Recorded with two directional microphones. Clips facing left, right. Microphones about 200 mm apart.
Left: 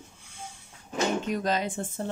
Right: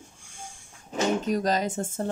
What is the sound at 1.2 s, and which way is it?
Speech, 40° right (ahead or behind).